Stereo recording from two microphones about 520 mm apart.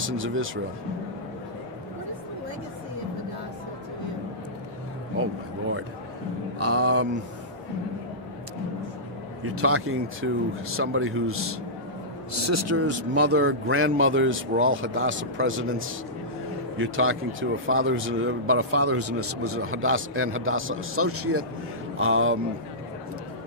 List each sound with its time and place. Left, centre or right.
0.0 s a man's voice: right
6.6 s a man's voice: right
9.4 s a man's voice: right